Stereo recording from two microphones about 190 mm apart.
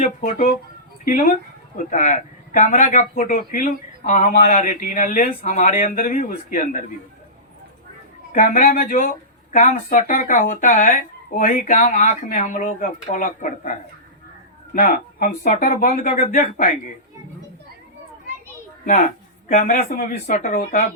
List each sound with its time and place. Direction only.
0.0 s a man's voice: 40° left (ahead or behind)
8.3 s speech: 45° left (ahead or behind)
14.8 s speech: 45° left (ahead or behind)
18.9 s speech: 40° left (ahead or behind)